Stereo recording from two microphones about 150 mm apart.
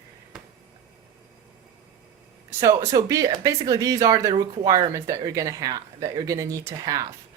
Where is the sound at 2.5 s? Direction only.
20° right (ahead or behind).